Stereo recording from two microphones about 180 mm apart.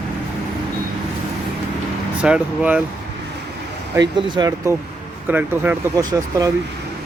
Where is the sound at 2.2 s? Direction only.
5° right (ahead or behind).